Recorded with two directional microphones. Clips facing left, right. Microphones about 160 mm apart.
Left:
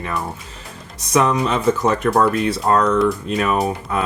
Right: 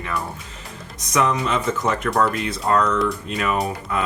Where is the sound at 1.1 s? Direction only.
30° left (ahead or behind).